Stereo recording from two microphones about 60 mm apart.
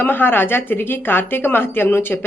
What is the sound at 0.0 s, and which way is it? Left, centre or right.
A woman's voice, left.